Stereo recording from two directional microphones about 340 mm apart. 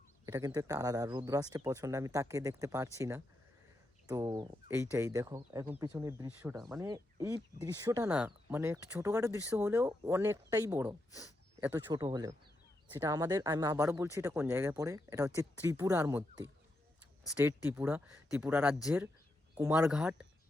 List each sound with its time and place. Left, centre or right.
0.3 s speech: centre
17.3 s speech: centre